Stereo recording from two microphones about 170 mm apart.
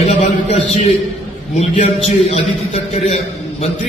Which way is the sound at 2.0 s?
40° left (ahead or behind).